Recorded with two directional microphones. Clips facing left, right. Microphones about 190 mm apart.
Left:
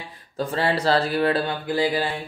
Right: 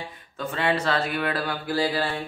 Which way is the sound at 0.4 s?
35° left (ahead or behind).